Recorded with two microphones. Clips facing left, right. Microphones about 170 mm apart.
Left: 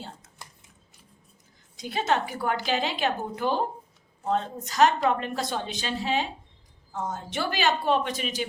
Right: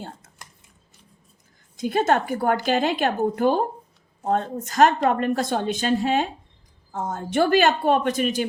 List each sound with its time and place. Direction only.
1.7 s a woman's voice: 50° right (ahead or behind)